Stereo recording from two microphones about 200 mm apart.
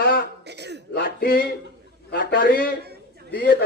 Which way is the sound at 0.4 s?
55° right (ahead or behind).